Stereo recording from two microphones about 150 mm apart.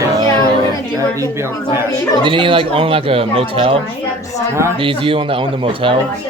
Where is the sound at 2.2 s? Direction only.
35° right (ahead or behind).